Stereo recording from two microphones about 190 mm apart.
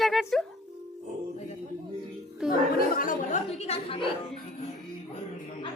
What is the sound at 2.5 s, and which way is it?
Speech, 50° left (ahead or behind).